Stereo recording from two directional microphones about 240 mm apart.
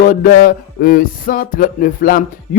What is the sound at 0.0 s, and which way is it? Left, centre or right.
Music, left.